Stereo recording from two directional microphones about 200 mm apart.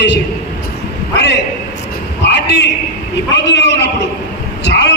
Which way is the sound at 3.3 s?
60° left (ahead or behind).